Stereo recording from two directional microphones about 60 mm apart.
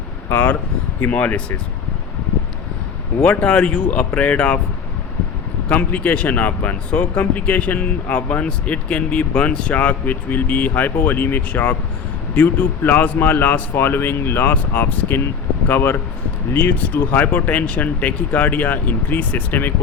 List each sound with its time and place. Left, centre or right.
0.3 s a man's voice: left
3.2 s speech: left
5.6 s a man's voice: left